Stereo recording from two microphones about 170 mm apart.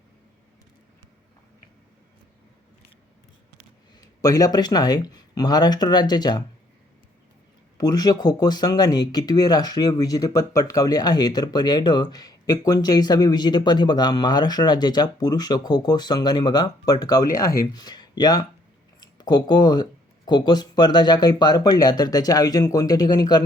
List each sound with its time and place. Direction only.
4.0 s speech: 20° left (ahead or behind)
7.8 s speech: 20° left (ahead or behind)